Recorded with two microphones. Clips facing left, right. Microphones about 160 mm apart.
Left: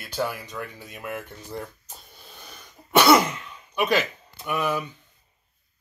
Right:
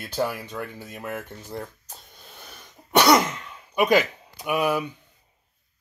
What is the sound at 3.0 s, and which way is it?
Throat clearing, 5° left (ahead or behind).